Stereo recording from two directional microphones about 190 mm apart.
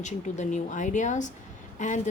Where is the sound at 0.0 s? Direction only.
40° left (ahead or behind).